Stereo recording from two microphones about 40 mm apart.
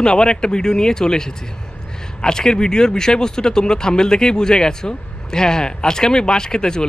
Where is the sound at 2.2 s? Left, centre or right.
Centre.